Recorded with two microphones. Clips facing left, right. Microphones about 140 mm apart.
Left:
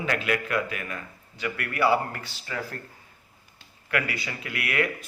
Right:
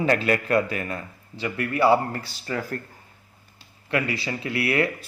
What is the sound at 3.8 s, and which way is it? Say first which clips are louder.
Speech: right 4 dB; 25° right (ahead or behind).